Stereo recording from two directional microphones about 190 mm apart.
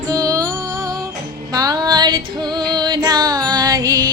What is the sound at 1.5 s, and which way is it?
Music, 20° right (ahead or behind).